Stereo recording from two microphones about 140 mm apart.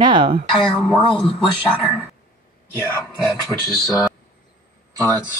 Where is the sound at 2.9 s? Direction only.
20° left (ahead or behind).